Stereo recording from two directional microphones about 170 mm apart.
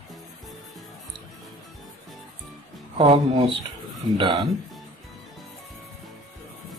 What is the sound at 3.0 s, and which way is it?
Speech, 25° right (ahead or behind).